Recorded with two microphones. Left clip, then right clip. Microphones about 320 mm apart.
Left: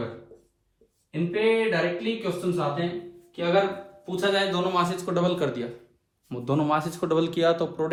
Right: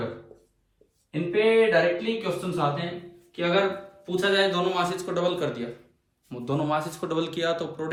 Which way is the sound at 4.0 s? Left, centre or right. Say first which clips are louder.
Right 2 dB; centre.